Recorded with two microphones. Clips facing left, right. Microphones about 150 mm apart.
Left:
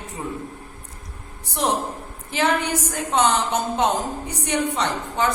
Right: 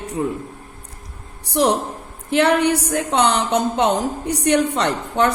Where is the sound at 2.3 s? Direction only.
65° right (ahead or behind).